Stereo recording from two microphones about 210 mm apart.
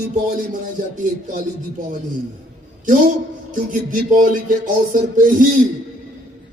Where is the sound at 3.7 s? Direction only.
40° right (ahead or behind).